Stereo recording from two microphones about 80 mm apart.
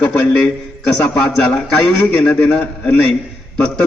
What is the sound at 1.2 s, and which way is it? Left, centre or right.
A man's voice, centre.